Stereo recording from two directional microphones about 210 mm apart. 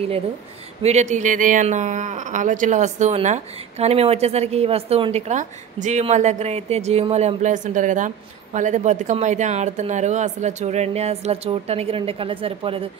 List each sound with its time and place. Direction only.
0.8 s speech: 35° right (ahead or behind)